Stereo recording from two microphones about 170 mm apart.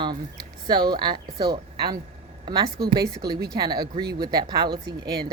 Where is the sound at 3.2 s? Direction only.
65° right (ahead or behind).